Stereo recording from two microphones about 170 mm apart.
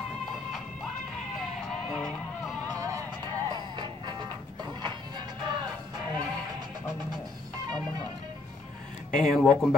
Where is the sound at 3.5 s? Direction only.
25° right (ahead or behind).